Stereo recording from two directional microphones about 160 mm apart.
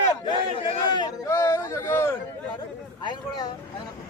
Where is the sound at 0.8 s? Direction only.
25° left (ahead or behind).